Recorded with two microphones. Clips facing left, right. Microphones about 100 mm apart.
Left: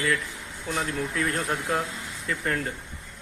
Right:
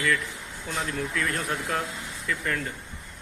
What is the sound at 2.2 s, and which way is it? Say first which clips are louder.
Speech: left 1 dB; 30° left (ahead or behind).